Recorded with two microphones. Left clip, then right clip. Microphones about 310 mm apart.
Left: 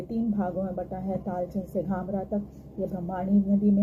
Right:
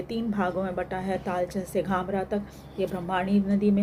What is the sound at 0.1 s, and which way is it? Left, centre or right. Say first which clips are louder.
A woman's voice: right 2 dB; right.